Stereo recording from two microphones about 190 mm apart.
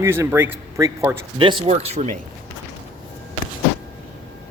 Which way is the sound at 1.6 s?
35° right (ahead or behind).